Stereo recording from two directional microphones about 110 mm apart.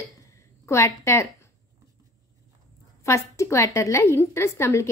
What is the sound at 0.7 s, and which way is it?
Speech, 25° left (ahead or behind).